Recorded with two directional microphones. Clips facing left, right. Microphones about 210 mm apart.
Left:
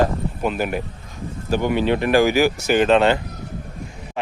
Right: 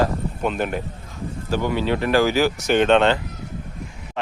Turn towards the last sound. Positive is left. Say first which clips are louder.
# left 1 dB
turn(degrees=5)  # may be behind; listen again after turning